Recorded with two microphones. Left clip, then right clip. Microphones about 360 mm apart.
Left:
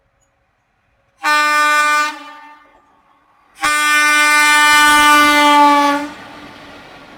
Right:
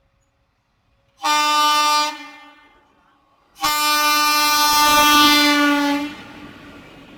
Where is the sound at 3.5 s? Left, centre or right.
Centre.